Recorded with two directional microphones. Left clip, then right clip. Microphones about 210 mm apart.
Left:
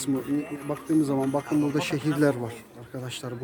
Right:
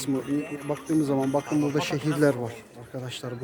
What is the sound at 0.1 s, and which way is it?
Speech, 35° right (ahead or behind).